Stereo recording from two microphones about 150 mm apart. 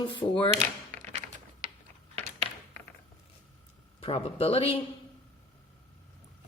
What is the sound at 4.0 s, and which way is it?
Speech, 40° left (ahead or behind).